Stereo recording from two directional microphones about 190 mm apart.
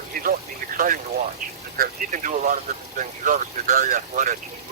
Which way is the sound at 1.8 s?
45° right (ahead or behind).